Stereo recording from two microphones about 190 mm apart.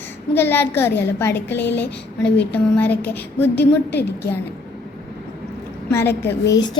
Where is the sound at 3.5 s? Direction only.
60° left (ahead or behind).